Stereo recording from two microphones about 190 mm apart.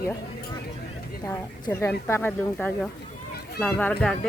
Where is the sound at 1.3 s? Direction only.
15° left (ahead or behind).